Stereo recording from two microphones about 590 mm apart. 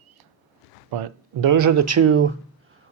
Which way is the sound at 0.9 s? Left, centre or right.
Right.